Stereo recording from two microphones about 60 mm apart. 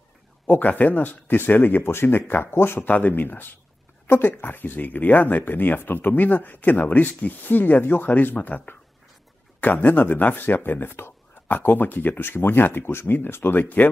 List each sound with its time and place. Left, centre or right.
0.5 s speech: left
2.9 s speech: left